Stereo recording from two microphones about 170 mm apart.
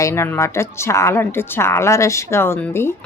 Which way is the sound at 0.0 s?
15° left (ahead or behind).